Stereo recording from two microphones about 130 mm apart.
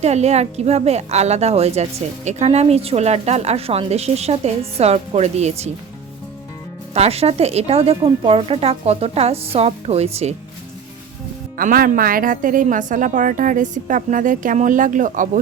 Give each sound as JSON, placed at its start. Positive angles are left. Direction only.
{"t": 0.0, "sound": "a woman's voice", "side_deg": -55}
{"t": 6.9, "sound": "a woman's voice", "side_deg": -55}
{"t": 11.5, "sound": "a woman's voice", "side_deg": -90}